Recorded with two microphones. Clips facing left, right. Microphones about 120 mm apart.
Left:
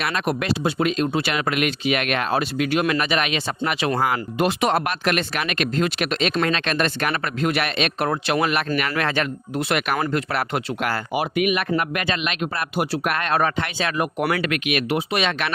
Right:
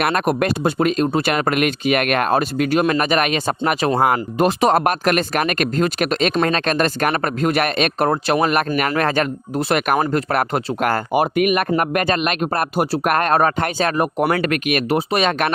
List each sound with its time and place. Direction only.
0.0 s speech: 50° right (ahead or behind)